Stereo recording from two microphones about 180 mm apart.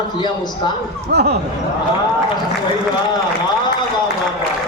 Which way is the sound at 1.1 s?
65° right (ahead or behind).